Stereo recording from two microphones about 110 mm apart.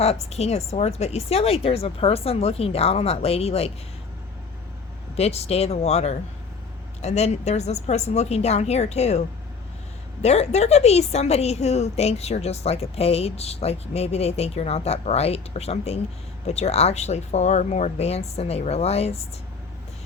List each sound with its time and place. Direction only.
0.0 s speech: 70° left (ahead or behind)
5.1 s a woman's voice: 70° left (ahead or behind); by 9.2 s 85° left
10.2 s a woman's voice: 75° left (ahead or behind)